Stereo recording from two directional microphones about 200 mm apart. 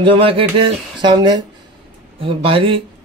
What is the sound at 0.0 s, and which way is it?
Speech, 25° right (ahead or behind).